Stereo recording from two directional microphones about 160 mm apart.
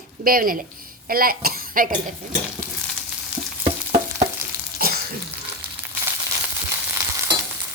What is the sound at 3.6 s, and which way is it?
Stir, 45° right (ahead or behind).